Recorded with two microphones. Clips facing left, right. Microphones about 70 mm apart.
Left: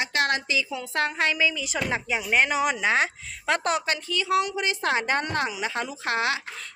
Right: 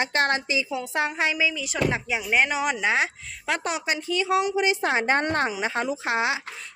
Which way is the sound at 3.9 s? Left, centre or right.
Right.